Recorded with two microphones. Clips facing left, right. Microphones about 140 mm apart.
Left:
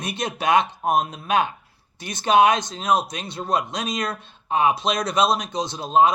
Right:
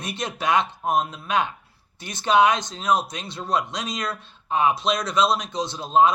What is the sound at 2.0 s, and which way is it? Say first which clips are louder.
Speech: left 3 dB; 15° left (ahead or behind).